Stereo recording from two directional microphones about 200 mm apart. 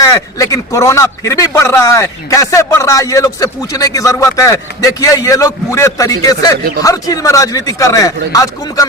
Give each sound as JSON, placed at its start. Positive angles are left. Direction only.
{"t": 0.0, "sound": "a man's voice", "side_deg": 15}